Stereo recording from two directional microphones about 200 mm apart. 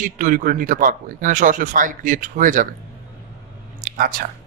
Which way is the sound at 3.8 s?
40° right (ahead or behind).